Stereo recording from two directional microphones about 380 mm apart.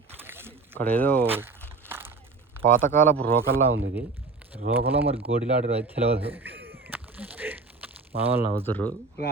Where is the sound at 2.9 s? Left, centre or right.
Centre.